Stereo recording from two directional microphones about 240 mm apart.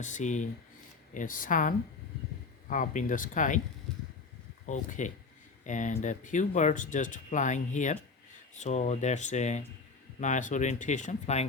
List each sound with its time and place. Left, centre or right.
0.0 s speech: left
4.6 s speech: left